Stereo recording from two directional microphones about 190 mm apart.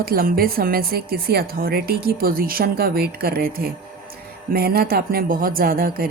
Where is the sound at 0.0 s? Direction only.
50° right (ahead or behind).